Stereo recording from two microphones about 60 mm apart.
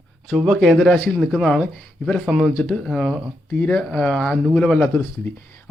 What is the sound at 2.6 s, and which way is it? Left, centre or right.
Speech, centre.